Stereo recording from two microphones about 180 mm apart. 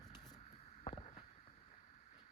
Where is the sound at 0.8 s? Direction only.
35° left (ahead or behind).